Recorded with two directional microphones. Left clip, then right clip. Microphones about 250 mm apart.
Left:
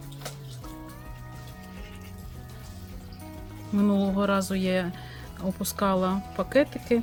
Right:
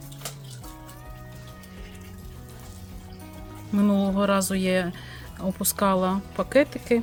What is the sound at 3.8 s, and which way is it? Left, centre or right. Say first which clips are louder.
Speech: right 2 dB; centre.